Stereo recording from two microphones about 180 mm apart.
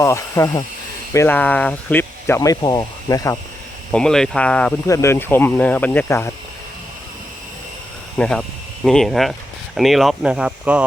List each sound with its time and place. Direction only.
0.0 s speech: 15° left (ahead or behind)
3.9 s speech: 5° left (ahead or behind)
8.2 s speech: 5° left (ahead or behind)